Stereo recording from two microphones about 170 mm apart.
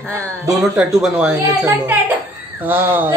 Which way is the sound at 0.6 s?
5° right (ahead or behind).